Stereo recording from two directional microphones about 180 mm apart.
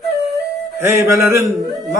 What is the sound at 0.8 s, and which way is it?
Speech, 15° right (ahead or behind).